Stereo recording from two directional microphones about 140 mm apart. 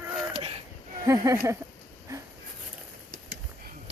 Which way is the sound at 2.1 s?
20° right (ahead or behind).